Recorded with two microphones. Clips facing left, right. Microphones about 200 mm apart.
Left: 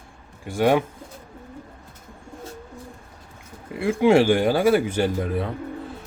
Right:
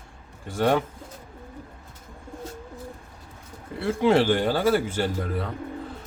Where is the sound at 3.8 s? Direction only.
15° left (ahead or behind).